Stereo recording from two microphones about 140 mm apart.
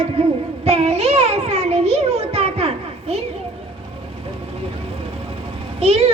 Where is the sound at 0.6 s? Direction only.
50° right (ahead or behind).